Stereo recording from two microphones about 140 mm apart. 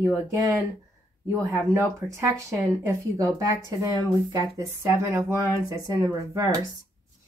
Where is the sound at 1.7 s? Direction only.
20° right (ahead or behind).